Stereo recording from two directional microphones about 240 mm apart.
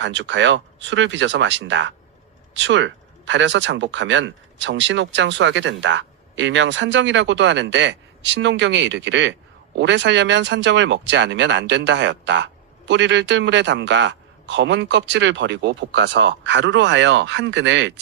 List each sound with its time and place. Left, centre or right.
0.0 s speech: right